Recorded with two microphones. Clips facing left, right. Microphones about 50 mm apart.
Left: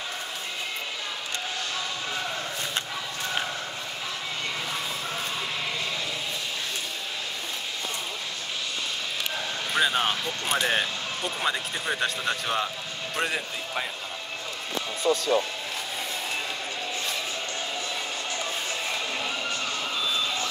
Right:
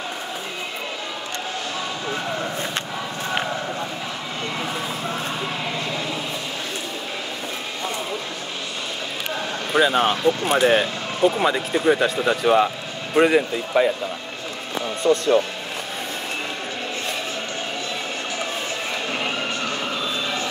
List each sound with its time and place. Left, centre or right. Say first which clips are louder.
9.8 s speech: right 7 dB; centre
13.1 s speech: right 13 dB; centre
13.4 s speech: right 12 dB; right
15.0 s speech: right 6 dB; right